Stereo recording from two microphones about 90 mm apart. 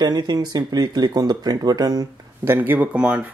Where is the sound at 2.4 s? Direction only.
25° right (ahead or behind).